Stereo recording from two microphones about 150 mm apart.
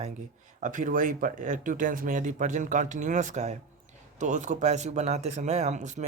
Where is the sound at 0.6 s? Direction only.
60° right (ahead or behind).